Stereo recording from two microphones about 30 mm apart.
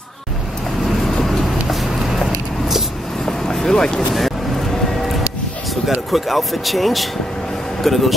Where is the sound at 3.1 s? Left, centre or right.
Centre.